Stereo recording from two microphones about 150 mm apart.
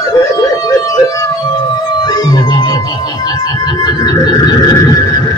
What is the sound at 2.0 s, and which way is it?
Music, 25° left (ahead or behind).